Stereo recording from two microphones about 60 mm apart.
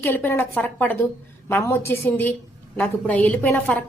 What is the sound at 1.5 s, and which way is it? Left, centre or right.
A woman's voice, left.